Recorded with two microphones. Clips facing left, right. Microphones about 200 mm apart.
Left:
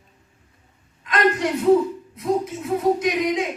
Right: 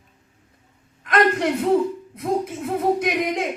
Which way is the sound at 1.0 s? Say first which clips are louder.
Right 1 dB; 55° right (ahead or behind).